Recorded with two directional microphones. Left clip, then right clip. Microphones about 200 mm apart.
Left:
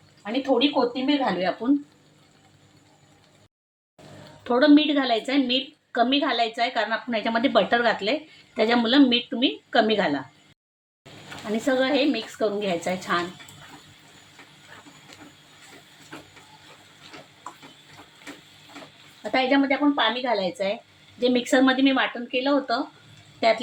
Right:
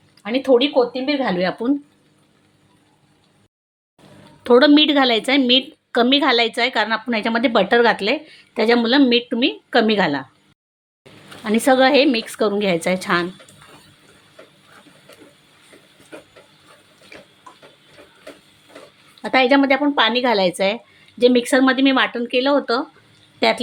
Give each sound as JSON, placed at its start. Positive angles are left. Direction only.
{"t": 1.2, "sound": "a woman's voice", "side_deg": -40}
{"t": 4.4, "sound": "a woman's voice", "side_deg": -45}
{"t": 11.4, "sound": "a woman's voice", "side_deg": -45}
{"t": 19.2, "sound": "a woman's voice", "side_deg": -40}